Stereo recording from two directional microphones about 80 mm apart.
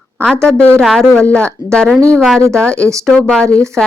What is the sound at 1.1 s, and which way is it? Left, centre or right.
Speech, centre.